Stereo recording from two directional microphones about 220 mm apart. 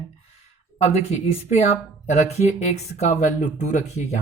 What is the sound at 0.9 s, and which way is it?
Speech, 30° left (ahead or behind).